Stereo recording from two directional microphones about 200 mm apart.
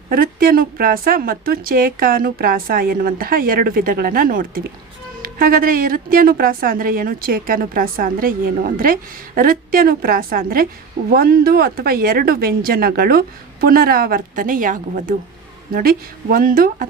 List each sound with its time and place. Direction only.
0.1 s a woman's voice: 45° right (ahead or behind)